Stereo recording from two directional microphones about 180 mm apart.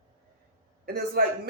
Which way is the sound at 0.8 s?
60° right (ahead or behind).